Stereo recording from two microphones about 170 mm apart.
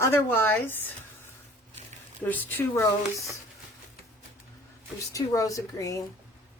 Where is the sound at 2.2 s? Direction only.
10° left (ahead or behind).